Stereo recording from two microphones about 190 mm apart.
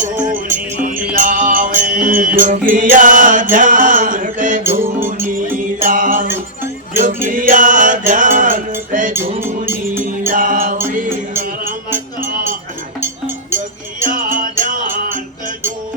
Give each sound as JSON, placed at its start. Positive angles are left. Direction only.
{"t": 0.0, "sound": "music", "side_deg": -45}
{"t": 2.9, "sound": "chant", "side_deg": -45}
{"t": 3.5, "sound": "mantra", "side_deg": -45}
{"t": 4.8, "sound": "music", "side_deg": -10}
{"t": 5.8, "sound": "mantra", "side_deg": -45}
{"t": 7.4, "sound": "music", "side_deg": -45}
{"t": 8.9, "sound": "cutlery", "side_deg": -45}
{"t": 9.4, "sound": "music", "side_deg": -10}
{"t": 10.3, "sound": "music", "side_deg": -45}
{"t": 13.0, "sound": "music", "side_deg": -15}
{"t": 14.0, "sound": "music", "side_deg": -45}